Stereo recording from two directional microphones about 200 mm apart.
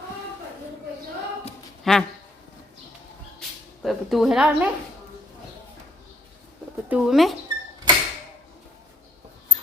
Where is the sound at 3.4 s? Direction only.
Centre (ahead or behind).